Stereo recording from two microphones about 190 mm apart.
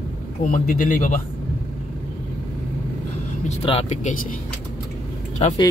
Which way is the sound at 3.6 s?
30° left (ahead or behind).